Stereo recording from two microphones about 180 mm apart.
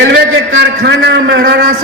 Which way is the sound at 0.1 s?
85° right.